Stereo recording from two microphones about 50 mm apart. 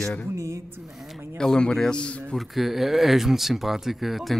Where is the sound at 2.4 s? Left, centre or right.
Centre.